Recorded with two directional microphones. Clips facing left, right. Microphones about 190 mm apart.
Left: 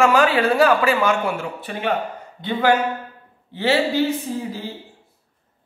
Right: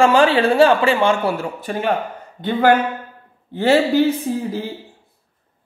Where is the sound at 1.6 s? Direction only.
45° right (ahead or behind).